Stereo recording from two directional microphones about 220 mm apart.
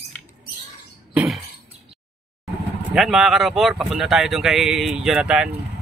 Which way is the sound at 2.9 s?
Centre (ahead or behind).